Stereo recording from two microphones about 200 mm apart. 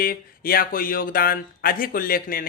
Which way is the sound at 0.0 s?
45° left (ahead or behind).